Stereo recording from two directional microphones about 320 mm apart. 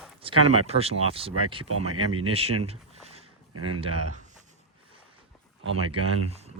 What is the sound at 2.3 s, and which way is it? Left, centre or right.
Speech, centre.